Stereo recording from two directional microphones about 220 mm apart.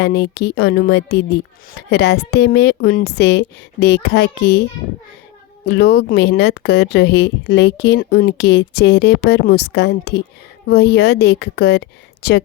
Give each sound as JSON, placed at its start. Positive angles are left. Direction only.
{"t": 0.0, "sound": "speech", "side_deg": 50}
{"t": 5.6, "sound": "speech", "side_deg": 50}